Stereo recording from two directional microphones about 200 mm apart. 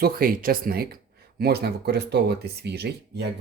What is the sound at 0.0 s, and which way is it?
Speech, 45° right (ahead or behind).